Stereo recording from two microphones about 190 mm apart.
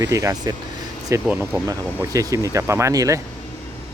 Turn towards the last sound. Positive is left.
turn(degrees=-15)  # may be behind; listen again after turning